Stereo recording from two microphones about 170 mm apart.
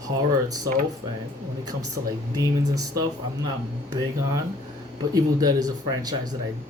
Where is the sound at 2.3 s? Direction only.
20° right (ahead or behind).